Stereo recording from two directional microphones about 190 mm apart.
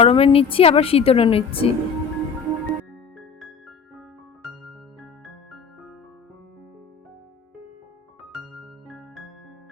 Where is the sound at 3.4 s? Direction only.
Centre (ahead or behind).